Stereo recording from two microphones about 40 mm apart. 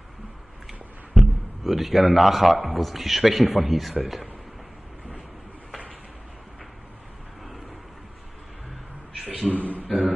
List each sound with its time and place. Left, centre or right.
1.1 s a man's voice: centre
9.6 s a sound: right
9.8 s beatboxing: centre